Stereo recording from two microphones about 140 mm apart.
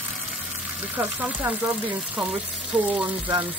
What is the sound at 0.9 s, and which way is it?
Speech, 10° right (ahead or behind).